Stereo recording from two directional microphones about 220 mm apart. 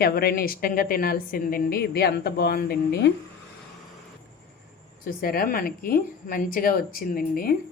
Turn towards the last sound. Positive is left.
turn(degrees=40)  # may be behind; listen again after turning